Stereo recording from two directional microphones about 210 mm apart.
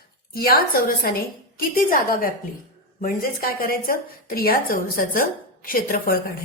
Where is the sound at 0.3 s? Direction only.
45° left (ahead or behind).